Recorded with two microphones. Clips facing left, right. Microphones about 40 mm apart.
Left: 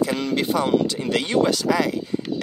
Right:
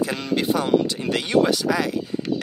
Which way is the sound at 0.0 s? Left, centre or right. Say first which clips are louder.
Left 1 dB; centre.